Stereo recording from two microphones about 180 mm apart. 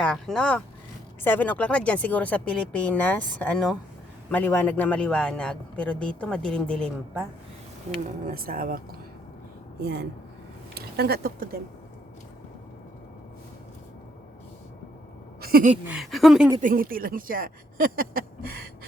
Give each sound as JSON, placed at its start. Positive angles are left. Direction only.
{"t": 0.0, "sound": "a man's voice", "side_deg": 5}
{"t": 8.3, "sound": "speech", "side_deg": -55}
{"t": 9.8, "sound": "speech", "side_deg": -65}
{"t": 15.4, "sound": "a sound", "side_deg": -55}
{"t": 15.9, "sound": "a man's voice", "side_deg": 0}
{"t": 16.6, "sound": "speech", "side_deg": -50}